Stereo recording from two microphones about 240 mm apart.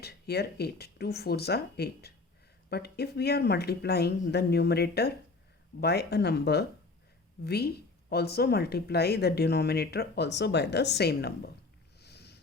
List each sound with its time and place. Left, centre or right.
0.0 s speech: left
11.9 s sniff: left